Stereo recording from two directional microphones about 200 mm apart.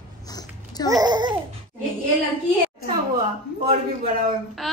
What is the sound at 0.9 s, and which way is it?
Speech, 20° right (ahead or behind).